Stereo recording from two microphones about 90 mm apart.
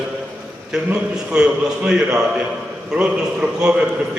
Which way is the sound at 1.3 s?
10° right (ahead or behind).